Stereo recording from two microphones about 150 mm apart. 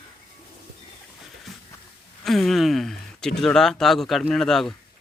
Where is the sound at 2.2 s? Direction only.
Centre (ahead or behind).